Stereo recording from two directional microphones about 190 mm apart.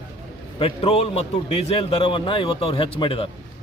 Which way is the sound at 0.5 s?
30° left (ahead or behind).